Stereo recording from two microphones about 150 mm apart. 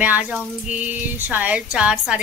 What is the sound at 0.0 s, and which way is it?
Speech, 10° right (ahead or behind).